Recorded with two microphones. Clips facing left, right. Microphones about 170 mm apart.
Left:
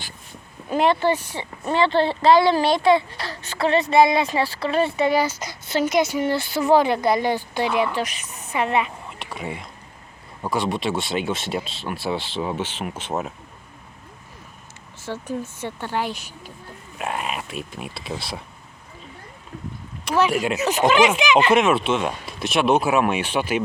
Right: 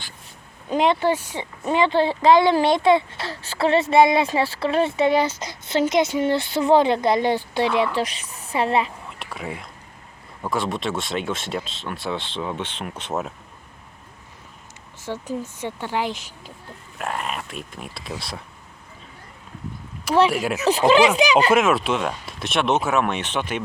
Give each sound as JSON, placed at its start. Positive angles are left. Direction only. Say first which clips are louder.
{"t": 0.9, "sound": "a woman's voice", "louder": "left 1 dB", "side_deg": -10}
{"t": 9.0, "sound": "a sound", "louder": "left 1 dB", "side_deg": 0}
{"t": 10.4, "sound": "speech", "louder": "left 1 dB", "side_deg": 0}
{"t": 15.0, "sound": "speech", "louder": "even", "side_deg": -15}
{"t": 17.0, "sound": "speech", "louder": "left 1 dB", "side_deg": 5}
{"t": 20.3, "sound": "speech", "louder": "left 1 dB", "side_deg": 0}
{"t": 20.7, "sound": "speech", "louder": "right 2 dB", "side_deg": -30}
{"t": 21.5, "sound": "speech", "louder": "left 1 dB", "side_deg": 0}